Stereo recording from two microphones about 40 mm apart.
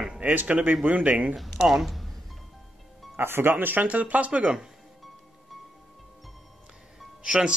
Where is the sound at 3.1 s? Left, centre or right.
Right.